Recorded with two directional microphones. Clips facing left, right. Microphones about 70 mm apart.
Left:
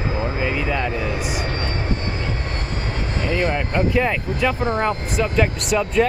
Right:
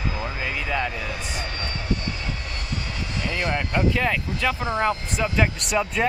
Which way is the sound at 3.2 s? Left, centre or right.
Left.